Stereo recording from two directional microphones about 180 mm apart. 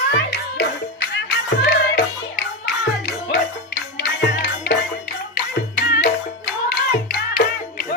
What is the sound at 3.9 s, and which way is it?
Music, 65° left (ahead or behind).